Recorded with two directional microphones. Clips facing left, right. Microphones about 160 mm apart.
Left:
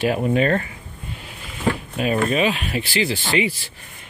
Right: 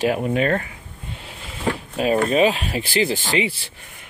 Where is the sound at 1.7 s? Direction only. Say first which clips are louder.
Right 2 dB; 30° right (ahead or behind).